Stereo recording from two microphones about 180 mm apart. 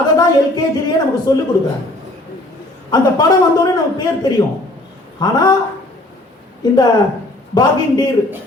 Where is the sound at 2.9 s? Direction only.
20° left (ahead or behind).